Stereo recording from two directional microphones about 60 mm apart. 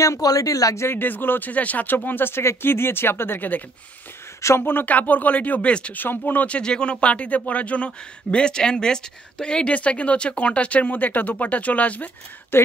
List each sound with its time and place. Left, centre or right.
0.0 s speech: left
0.7 s speech: left
4.4 s speech: left
4.6 s speech: left
5.9 s speech: left
12.5 s speech: left